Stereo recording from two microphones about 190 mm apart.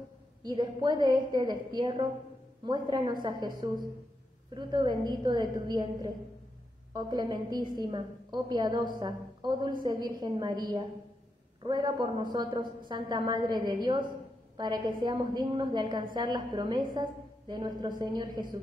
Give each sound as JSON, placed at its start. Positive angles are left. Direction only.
{"t": 0.4, "sound": "a woman's voice", "side_deg": -20}
{"t": 4.6, "sound": "a woman's voice", "side_deg": -20}